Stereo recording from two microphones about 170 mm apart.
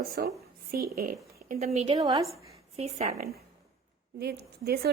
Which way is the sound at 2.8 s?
40° right (ahead or behind).